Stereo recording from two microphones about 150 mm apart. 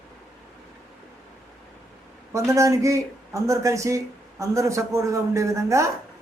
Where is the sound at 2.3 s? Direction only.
20° right (ahead or behind).